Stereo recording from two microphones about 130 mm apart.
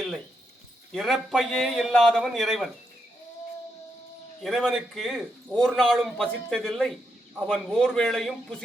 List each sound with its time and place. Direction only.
0.9 s a man's voice: centre (ahead or behind)
4.4 s a man's voice: centre (ahead or behind)